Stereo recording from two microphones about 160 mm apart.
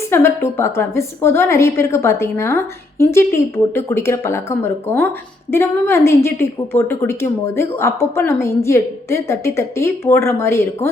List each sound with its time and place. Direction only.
0.1 s a woman's voice: 15° left (ahead or behind)